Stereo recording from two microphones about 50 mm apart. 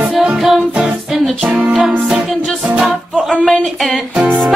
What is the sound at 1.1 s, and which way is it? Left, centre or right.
Music, centre.